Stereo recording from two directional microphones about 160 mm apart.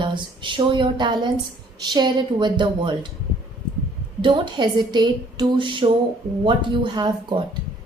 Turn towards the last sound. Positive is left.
turn(degrees=-25)  # may be behind; listen again after turning